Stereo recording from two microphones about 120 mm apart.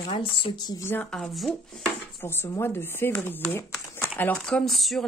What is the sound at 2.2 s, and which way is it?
Speech, 20° left (ahead or behind).